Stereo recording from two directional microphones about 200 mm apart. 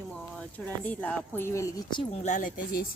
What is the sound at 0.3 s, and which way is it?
A woman's voice, 5° left (ahead or behind).